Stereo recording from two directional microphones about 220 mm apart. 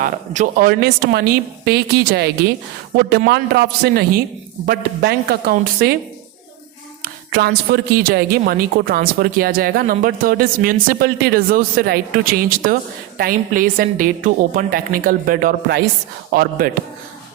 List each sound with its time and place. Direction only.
0.0 s speech: 40° right (ahead or behind)
7.0 s hands: 45° right (ahead or behind)
8.0 s speech: 45° right (ahead or behind)